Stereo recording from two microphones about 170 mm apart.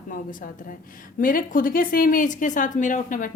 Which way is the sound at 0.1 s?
55° left (ahead or behind).